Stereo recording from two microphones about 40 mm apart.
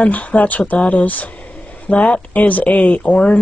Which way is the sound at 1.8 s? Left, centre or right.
Left.